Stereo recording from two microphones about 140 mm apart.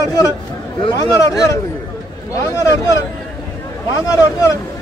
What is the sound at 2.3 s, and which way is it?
Vehicle, 20° left (ahead or behind).